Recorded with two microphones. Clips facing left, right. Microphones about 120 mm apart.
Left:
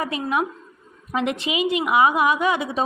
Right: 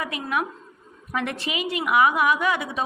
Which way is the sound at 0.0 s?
25° left (ahead or behind).